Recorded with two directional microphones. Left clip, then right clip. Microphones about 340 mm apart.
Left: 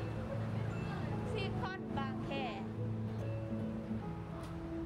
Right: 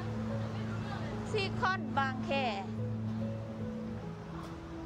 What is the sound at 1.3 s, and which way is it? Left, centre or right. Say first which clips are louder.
Speech: right 11 dB; centre.